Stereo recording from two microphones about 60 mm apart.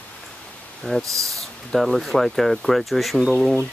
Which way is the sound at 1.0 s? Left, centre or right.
Right.